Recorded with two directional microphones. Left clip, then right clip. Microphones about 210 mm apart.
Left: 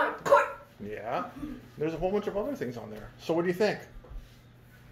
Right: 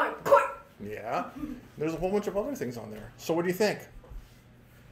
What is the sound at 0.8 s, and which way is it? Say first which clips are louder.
Speech: right 1 dB; 5° right (ahead or behind).